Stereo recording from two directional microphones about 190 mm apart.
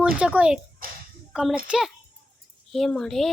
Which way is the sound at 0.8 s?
50° right (ahead or behind).